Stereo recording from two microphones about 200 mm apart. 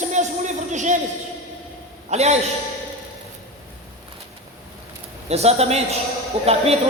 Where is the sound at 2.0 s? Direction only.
30° right (ahead or behind).